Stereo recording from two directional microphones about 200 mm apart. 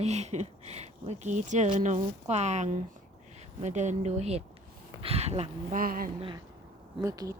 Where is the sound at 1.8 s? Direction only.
35° right (ahead or behind).